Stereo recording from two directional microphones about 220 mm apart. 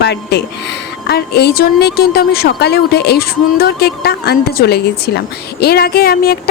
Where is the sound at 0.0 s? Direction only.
50° left (ahead or behind).